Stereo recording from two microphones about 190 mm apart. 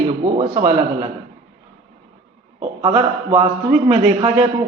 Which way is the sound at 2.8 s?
30° right (ahead or behind).